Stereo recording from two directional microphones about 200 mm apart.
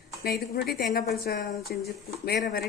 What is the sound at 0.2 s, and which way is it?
A woman's voice, 50° left (ahead or behind).